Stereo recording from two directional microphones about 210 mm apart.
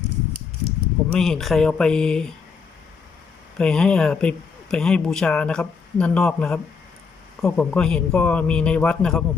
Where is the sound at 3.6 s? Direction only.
5° left (ahead or behind).